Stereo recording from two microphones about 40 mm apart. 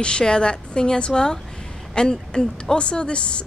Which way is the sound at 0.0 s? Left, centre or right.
Left.